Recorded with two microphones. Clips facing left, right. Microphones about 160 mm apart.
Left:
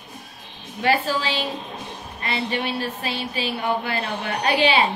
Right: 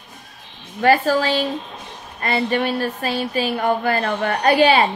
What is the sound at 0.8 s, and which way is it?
A woman's voice, 45° right (ahead or behind).